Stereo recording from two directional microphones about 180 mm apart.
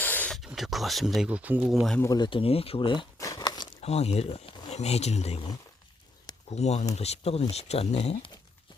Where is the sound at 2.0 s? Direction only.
20° left (ahead or behind).